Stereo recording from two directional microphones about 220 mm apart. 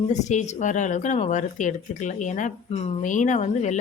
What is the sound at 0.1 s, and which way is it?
Speech, 30° left (ahead or behind).